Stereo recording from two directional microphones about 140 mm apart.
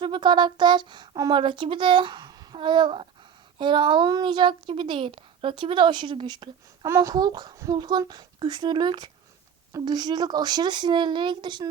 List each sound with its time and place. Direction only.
0.0 s a woman's voice: 35° right (ahead or behind)
6.8 s a child's voice: 20° right (ahead or behind)